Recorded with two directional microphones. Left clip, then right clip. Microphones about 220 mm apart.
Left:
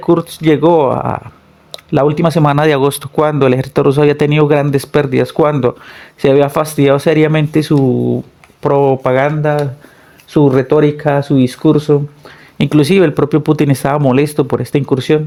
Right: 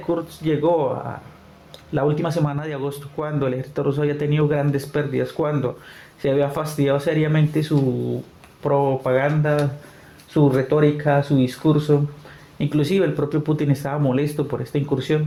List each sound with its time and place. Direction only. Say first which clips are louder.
0.1 s a man's voice: left 11 dB; 45° left (ahead or behind)